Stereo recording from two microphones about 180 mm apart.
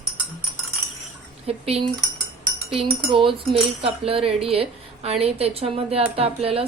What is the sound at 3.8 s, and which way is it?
A woman's voice, 30° right (ahead or behind).